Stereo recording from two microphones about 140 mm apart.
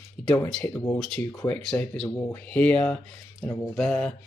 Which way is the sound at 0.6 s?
15° left (ahead or behind).